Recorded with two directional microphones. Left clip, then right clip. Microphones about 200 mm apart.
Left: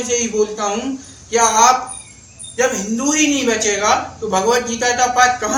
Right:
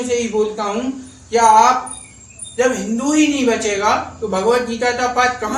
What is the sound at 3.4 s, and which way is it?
A man's voice, 20° left (ahead or behind).